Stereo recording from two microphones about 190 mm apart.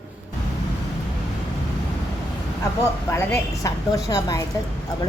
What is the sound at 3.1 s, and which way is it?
A woman's voice, 15° left (ahead or behind).